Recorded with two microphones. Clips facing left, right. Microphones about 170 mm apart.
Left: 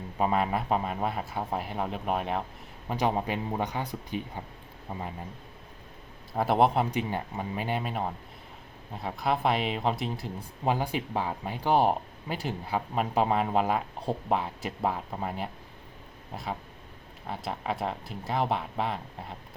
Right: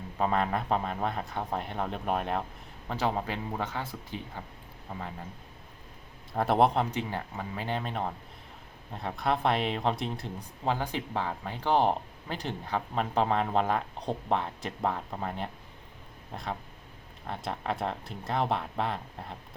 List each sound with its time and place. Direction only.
0.2 s speech: 10° left (ahead or behind)
2.9 s speech: 15° left (ahead or behind)
6.3 s speech: centre (ahead or behind)
6.9 s speech: 15° left (ahead or behind)
10.6 s speech: 15° left (ahead or behind)